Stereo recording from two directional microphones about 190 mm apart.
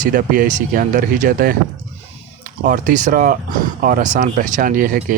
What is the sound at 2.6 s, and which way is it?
Speech, 45° right (ahead or behind).